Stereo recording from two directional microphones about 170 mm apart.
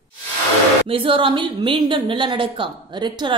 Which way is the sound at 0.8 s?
30° right (ahead or behind).